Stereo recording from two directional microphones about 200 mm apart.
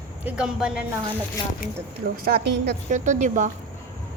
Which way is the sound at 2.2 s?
55° right (ahead or behind).